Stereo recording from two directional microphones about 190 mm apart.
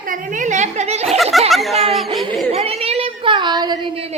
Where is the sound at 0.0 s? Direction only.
45° right (ahead or behind).